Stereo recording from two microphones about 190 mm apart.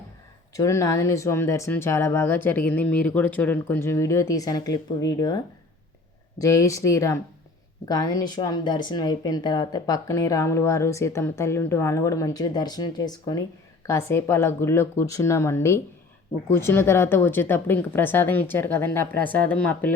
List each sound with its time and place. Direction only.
0.5 s speech: 15° left (ahead or behind)
6.4 s speech: 15° left (ahead or behind)